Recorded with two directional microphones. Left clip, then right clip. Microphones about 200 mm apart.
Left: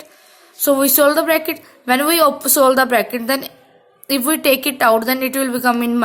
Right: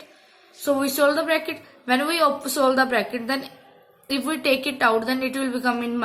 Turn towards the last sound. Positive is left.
turn(degrees=55)  # may be behind; listen again after turning